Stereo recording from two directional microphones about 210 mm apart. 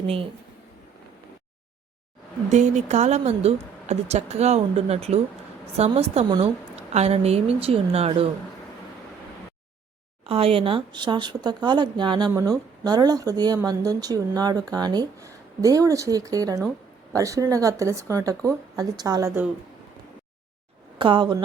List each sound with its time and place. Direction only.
2.5 s a woman's voice: 35° right (ahead or behind)
10.2 s speech: 25° right (ahead or behind)
21.0 s speech: 20° right (ahead or behind)